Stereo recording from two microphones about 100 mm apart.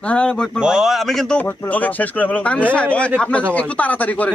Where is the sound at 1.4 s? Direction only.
20° left (ahead or behind).